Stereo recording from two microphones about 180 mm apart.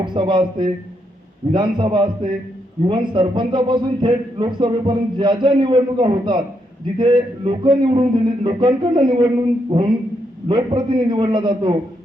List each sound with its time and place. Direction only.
0.0 s a man's voice: 25° right (ahead or behind)